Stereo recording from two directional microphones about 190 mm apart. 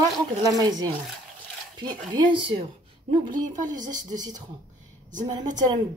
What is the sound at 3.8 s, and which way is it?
Speech, 20° right (ahead or behind).